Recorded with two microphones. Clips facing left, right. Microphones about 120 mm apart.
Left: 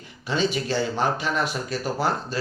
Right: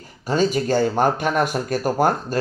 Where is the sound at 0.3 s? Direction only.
45° right (ahead or behind).